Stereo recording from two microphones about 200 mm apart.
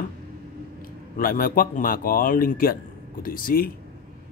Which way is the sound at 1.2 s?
45° left (ahead or behind).